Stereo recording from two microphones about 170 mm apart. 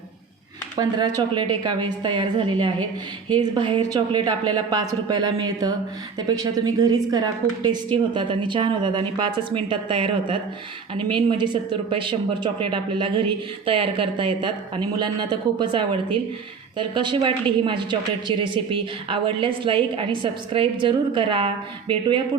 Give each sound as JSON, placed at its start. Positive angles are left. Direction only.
{"t": 0.8, "sound": "speech", "side_deg": -25}